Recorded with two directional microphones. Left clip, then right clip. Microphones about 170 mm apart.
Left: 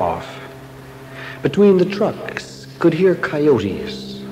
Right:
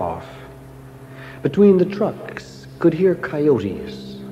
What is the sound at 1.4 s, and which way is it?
A man's voice, 25° left (ahead or behind).